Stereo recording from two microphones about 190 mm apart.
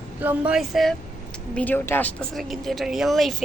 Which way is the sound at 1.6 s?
10° left (ahead or behind).